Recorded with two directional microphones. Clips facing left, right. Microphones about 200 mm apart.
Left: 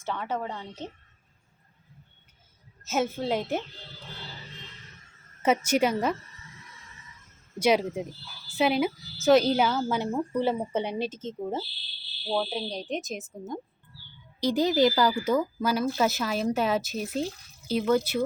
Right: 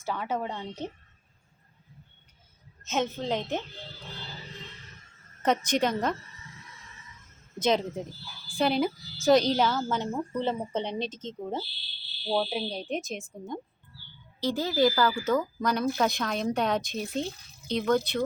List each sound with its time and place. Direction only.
0.0 s speech: 10° right (ahead or behind)
2.8 s a woman's voice: 5° left (ahead or behind)
5.4 s a woman's voice: 10° left (ahead or behind)
7.6 s a woman's voice: 10° left (ahead or behind)
12.3 s speech: 10° right (ahead or behind)
14.4 s a woman's voice: 15° left (ahead or behind)